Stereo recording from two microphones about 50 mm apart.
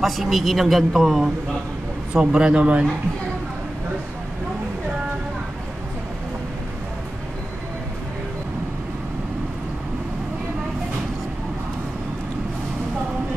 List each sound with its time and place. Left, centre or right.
0.0 s speech: centre
2.1 s a man's voice: centre